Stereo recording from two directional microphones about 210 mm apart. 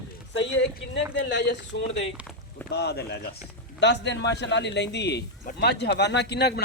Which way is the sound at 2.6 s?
50° left (ahead or behind).